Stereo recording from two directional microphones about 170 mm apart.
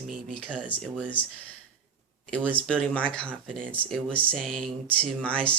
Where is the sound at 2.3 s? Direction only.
10° left (ahead or behind).